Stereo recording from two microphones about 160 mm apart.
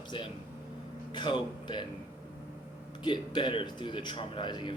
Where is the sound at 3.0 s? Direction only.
30° left (ahead or behind).